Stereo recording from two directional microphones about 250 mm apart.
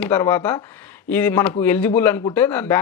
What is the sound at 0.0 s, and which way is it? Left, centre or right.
Speech, centre.